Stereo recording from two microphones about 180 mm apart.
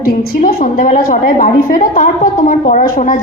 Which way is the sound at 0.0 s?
50° left (ahead or behind).